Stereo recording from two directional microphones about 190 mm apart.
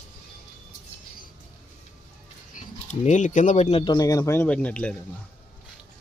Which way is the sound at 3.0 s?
40° left (ahead or behind).